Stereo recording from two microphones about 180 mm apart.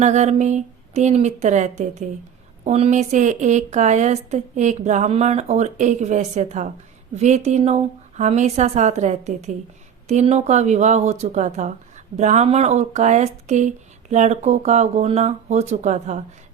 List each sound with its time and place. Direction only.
0.0 s speech: 40° right (ahead or behind)